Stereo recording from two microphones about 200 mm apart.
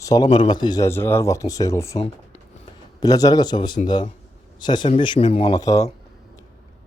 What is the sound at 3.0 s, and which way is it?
A man's voice, 20° left (ahead or behind).